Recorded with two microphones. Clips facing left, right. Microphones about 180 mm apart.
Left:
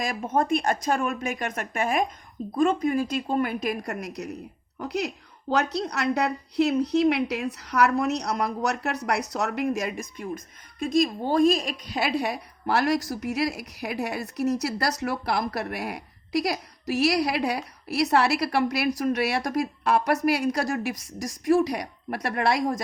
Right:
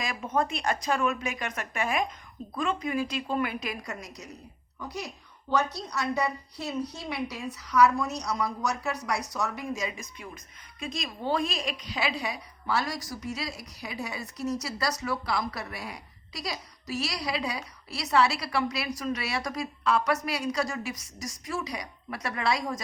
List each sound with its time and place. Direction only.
0.0 s a woman's voice: 45° left (ahead or behind)
4.8 s a woman's voice: 75° left (ahead or behind); by 22.6 s 60° left (ahead or behind)